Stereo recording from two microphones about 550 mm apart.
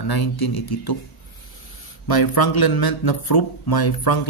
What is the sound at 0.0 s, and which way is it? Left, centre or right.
Speech, left.